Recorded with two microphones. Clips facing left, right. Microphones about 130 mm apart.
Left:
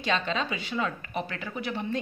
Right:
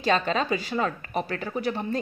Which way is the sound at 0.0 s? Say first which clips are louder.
Right 5 dB; 45° right (ahead or behind).